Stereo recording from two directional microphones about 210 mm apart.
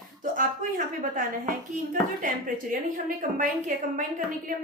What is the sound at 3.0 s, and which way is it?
Speech, 40° right (ahead or behind).